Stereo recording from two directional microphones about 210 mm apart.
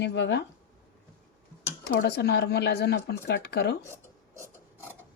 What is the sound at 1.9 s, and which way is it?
Speech, 55° left (ahead or behind).